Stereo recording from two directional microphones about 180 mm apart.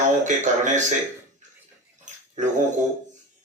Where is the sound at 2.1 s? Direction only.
40° right (ahead or behind).